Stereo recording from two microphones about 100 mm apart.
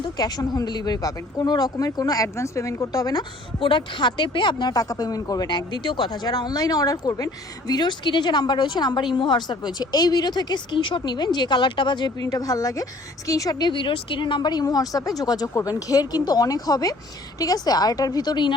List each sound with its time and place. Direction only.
0.0 s a woman's voice: 40° left (ahead or behind)
3.6 s speech: 55° left (ahead or behind)
6.1 s a woman's voice: 40° left (ahead or behind)
12.2 s a woman's voice: 35° left (ahead or behind)